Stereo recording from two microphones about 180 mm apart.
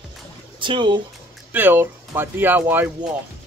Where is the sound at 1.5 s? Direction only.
10° right (ahead or behind).